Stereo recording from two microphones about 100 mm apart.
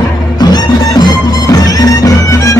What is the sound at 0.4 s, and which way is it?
Music, 45° left (ahead or behind).